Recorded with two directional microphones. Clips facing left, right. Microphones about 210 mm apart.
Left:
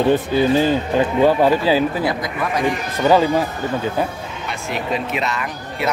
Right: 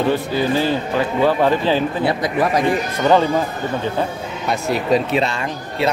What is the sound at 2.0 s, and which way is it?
Speech, 30° right (ahead or behind).